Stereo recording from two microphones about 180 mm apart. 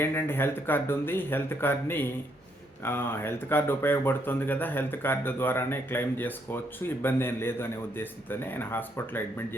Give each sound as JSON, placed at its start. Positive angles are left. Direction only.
{"t": 0.0, "sound": "speech", "side_deg": 15}